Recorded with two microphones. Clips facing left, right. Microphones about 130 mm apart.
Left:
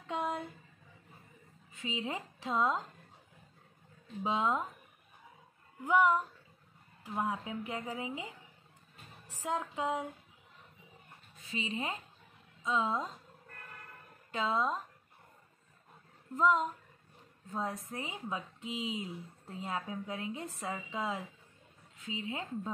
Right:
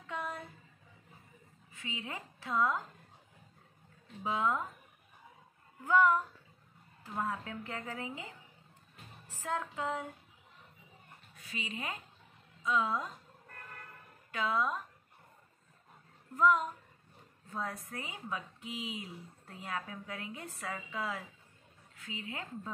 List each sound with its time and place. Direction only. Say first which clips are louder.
0.0 s a sound: left 5 dB; 20° left (ahead or behind)
1.7 s a woman's voice: left 5 dB; 20° left (ahead or behind)
4.2 s a woman's voice: left 1 dB; 20° left (ahead or behind)
5.9 s a woman's voice: even; 15° left (ahead or behind)
9.3 s music: left 1 dB; 15° left (ahead or behind)
11.3 s a woman's voice: left 5 dB; 25° left (ahead or behind)
14.3 s a woman's voice: left 1 dB; 25° left (ahead or behind)
16.3 s a woman's voice: even; 25° left (ahead or behind)